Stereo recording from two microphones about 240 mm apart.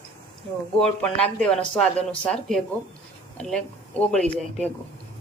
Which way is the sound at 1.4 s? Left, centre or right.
Centre.